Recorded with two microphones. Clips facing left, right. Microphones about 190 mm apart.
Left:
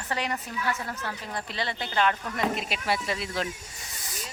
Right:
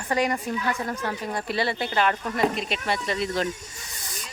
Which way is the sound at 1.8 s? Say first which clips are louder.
Left 1 dB; 55° right (ahead or behind).